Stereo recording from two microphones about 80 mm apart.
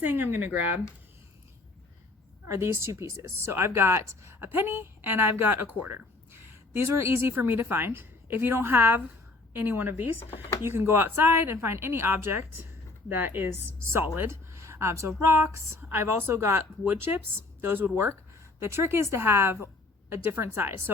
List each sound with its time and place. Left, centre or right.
0.0 s speech: right
2.5 s a woman's voice: right